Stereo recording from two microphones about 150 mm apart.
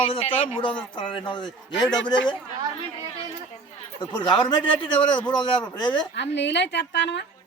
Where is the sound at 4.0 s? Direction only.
30° left (ahead or behind).